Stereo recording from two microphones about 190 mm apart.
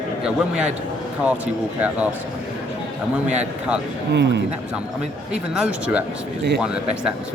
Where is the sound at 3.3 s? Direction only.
5° right (ahead or behind).